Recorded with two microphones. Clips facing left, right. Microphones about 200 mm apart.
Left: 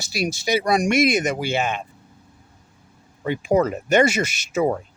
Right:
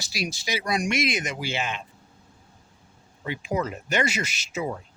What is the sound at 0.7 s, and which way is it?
Speech, 45° left (ahead or behind).